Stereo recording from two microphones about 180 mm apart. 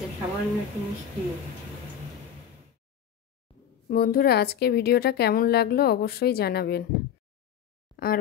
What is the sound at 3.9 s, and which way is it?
Speech, 60° left (ahead or behind).